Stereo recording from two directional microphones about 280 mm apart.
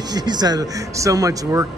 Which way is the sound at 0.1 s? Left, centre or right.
Centre.